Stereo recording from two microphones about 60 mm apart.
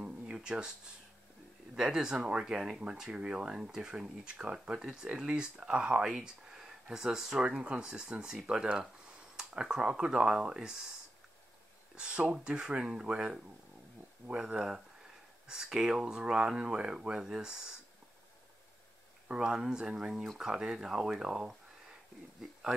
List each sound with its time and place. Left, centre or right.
0.0 s a sound: centre
1.8 s speech: centre
19.2 s speech: centre